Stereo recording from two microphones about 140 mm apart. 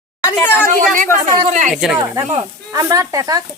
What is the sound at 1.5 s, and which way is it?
Speech, 60° right (ahead or behind).